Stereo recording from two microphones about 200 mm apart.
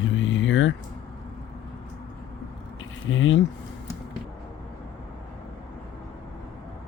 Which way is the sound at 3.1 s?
80° left.